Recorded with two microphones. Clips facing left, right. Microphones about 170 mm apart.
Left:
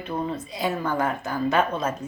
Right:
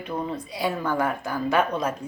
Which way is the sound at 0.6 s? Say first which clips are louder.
Even; 20° left (ahead or behind).